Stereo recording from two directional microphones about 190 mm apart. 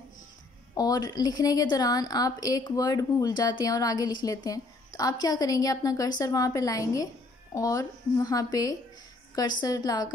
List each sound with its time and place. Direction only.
0.7 s a woman's voice: 20° left (ahead or behind)